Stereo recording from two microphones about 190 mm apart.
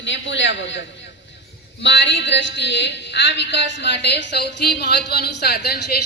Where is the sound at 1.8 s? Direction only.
70° left (ahead or behind).